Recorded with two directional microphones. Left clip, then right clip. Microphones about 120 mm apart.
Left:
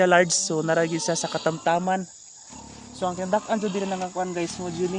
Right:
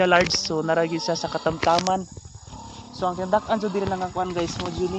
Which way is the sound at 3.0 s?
25° left (ahead or behind).